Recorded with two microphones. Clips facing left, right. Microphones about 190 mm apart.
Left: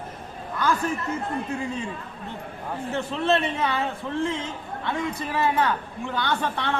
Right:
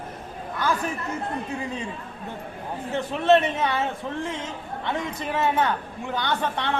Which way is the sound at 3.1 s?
20° right (ahead or behind).